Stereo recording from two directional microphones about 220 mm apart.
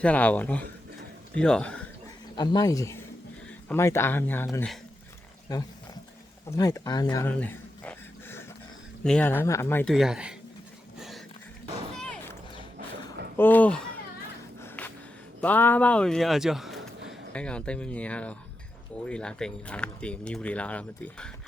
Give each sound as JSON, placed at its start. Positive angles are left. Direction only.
{"t": 0.0, "sound": "speech", "side_deg": 5}
{"t": 2.3, "sound": "speech", "side_deg": 20}
{"t": 5.5, "sound": "speech", "side_deg": 15}
{"t": 13.3, "sound": "speech", "side_deg": 10}
{"t": 14.6, "sound": "a sound", "side_deg": 10}
{"t": 15.4, "sound": "speech", "side_deg": 5}